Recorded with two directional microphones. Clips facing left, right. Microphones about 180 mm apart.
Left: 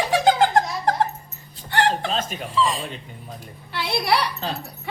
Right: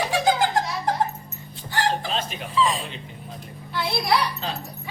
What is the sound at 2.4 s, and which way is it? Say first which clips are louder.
Speech: right 1 dB; centre (ahead or behind).